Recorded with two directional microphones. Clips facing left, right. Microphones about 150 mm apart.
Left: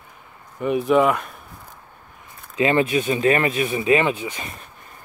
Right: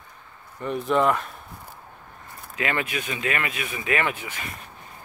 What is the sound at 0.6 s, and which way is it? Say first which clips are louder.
Speech: left 5 dB; 10° left (ahead or behind).